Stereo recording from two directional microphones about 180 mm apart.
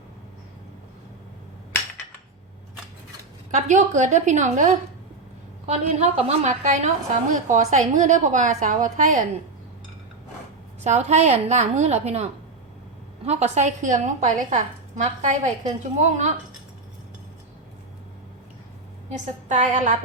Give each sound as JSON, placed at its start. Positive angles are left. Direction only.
{"t": 3.5, "sound": "a woman's voice", "side_deg": -40}
{"t": 10.8, "sound": "a woman's voice", "side_deg": -40}
{"t": 19.0, "sound": "a woman's voice", "side_deg": -40}